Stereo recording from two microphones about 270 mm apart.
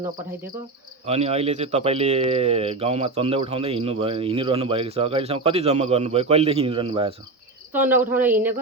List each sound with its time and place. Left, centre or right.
1.0 s speech: right
7.7 s speech: centre